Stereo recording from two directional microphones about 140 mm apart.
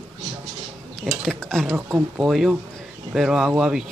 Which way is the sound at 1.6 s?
10° right (ahead or behind).